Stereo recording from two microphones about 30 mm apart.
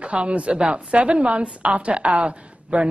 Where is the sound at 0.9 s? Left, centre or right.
Right.